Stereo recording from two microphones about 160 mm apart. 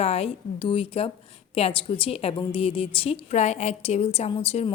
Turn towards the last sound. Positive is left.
turn(degrees=40)  # may be behind; listen again after turning